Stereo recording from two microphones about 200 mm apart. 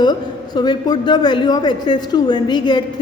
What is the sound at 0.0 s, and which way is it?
A man's voice, 20° left (ahead or behind).